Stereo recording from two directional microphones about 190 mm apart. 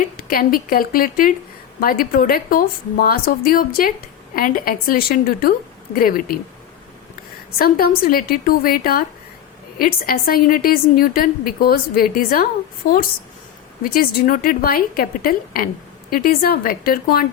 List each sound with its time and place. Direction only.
0.2 s a woman's voice: 50° left (ahead or behind)
7.6 s a woman's voice: 50° left (ahead or behind)